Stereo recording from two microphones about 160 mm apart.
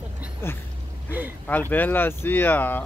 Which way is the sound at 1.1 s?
10° right (ahead or behind).